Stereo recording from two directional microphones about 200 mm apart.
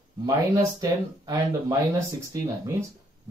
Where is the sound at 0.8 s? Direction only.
20° right (ahead or behind).